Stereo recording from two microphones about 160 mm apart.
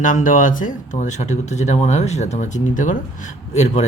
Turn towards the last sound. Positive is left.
turn(degrees=45)  # may be behind; listen again after turning